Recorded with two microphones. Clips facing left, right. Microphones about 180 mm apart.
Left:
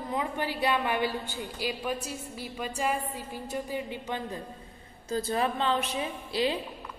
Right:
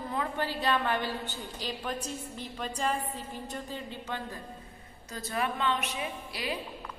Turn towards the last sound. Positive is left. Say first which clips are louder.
# left 7 dB
turn(degrees=30)  # may be behind; listen again after turning